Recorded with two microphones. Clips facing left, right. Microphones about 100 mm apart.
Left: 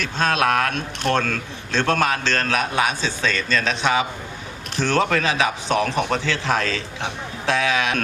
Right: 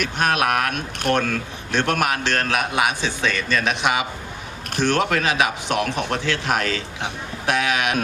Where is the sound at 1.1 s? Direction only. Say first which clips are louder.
Right 2 dB; 15° right (ahead or behind).